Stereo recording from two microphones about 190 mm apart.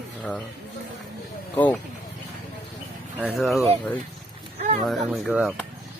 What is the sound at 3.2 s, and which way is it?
Speech, centre (ahead or behind).